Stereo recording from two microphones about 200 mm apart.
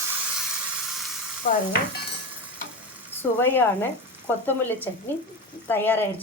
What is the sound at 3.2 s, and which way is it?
Speech, 10° left (ahead or behind).